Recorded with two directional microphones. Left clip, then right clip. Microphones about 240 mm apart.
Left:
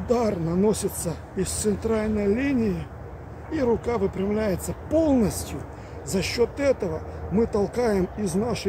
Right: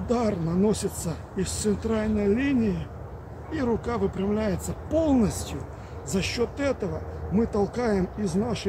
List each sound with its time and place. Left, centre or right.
0.1 s speech: centre